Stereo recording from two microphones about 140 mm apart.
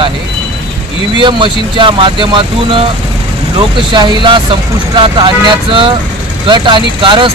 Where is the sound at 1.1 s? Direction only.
35° right (ahead or behind).